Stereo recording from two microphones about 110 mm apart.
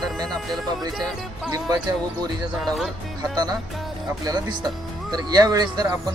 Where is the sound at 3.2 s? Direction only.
40° right (ahead or behind).